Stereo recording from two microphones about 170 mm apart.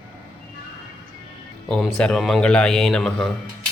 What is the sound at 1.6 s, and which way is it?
Speech, 5° left (ahead or behind).